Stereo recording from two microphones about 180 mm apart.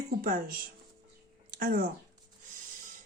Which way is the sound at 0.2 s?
50° right (ahead or behind).